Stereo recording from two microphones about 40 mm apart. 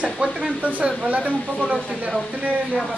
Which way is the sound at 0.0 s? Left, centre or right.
Right.